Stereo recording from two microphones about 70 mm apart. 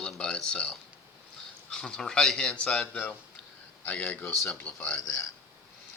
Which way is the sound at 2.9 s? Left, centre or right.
Left.